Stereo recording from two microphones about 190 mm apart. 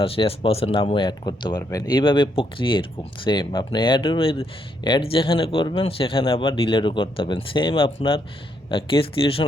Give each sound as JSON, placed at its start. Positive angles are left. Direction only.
{"t": 0.0, "sound": "speech", "side_deg": 30}